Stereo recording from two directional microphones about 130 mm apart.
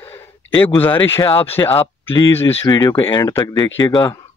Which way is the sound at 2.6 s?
30° left (ahead or behind).